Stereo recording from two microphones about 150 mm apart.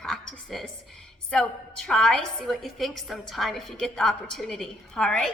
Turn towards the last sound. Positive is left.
turn(degrees=5)  # may be behind; listen again after turning